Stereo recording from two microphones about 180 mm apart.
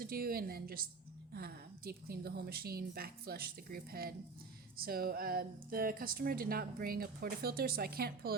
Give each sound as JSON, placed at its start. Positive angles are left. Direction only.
{"t": 0.0, "sound": "speech", "side_deg": -55}